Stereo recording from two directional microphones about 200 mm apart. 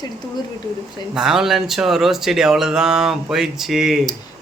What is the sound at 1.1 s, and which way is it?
Speech, centre (ahead or behind).